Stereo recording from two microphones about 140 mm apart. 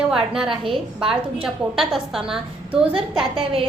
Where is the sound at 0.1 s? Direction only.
5° right (ahead or behind).